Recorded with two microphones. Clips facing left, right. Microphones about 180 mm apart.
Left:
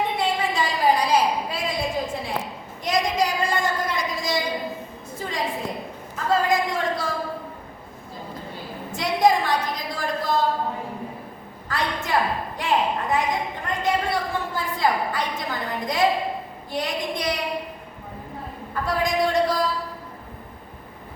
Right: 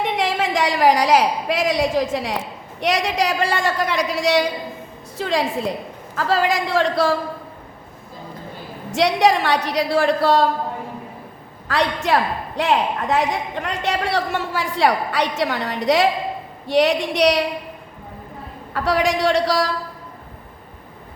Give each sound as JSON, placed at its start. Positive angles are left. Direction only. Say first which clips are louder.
{"t": 0.0, "sound": "a woman's voice", "louder": "right 3 dB", "side_deg": -90}
{"t": 2.8, "sound": "a woman's voice", "louder": "right 3 dB", "side_deg": -75}
{"t": 8.9, "sound": "a woman's voice", "louder": "right 3 dB", "side_deg": -80}
{"t": 11.7, "sound": "a woman's voice", "louder": "right 5 dB", "side_deg": -85}
{"t": 18.7, "sound": "a woman's voice", "louder": "right 5 dB", "side_deg": -80}